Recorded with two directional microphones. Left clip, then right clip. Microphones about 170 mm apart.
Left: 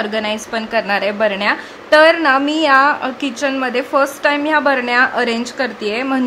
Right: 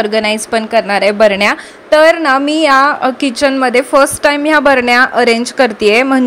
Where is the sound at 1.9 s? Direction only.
25° right (ahead or behind).